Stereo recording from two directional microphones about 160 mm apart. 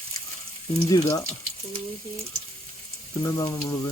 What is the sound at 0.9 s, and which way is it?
Speech, 20° left (ahead or behind).